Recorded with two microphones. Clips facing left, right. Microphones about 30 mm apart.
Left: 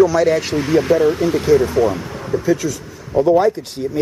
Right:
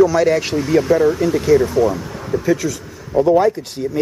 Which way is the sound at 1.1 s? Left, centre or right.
Left.